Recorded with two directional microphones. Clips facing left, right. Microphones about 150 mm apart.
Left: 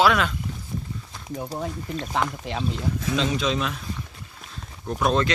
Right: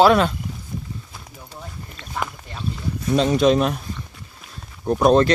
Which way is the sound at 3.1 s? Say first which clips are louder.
Right 10 dB; 45° right (ahead or behind).